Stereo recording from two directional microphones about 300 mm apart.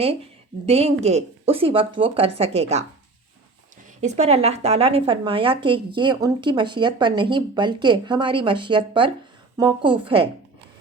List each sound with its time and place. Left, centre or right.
0.6 s a woman's voice: centre
4.0 s speech: right